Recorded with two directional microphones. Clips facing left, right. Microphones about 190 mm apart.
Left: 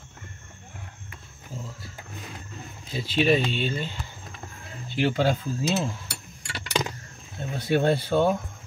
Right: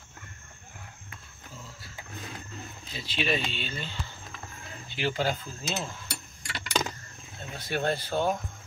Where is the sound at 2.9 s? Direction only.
50° left (ahead or behind).